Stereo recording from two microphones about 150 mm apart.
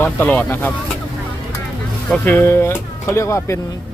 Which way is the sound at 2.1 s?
10° left (ahead or behind).